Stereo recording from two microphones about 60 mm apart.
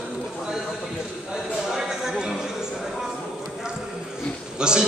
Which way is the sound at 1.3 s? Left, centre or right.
Centre.